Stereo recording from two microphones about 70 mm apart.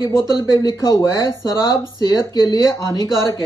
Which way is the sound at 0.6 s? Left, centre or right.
Left.